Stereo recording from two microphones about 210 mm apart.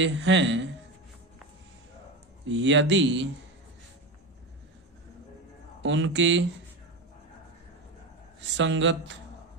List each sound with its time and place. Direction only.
0.0 s speech: 60° right (ahead or behind)
2.5 s speech: 60° right (ahead or behind)
5.8 s speech: 60° right (ahead or behind)
8.4 s speech: 60° right (ahead or behind)